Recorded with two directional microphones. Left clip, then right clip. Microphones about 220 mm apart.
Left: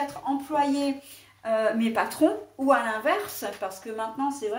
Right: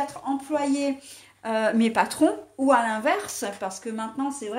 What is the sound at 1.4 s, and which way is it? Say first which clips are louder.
A woman's voice: right 1 dB; 45° right (ahead or behind).